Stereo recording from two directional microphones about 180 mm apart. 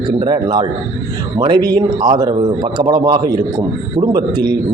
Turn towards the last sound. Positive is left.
turn(degrees=-25)  # may be behind; listen again after turning